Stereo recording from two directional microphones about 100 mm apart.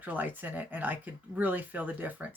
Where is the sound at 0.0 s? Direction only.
15° right (ahead or behind).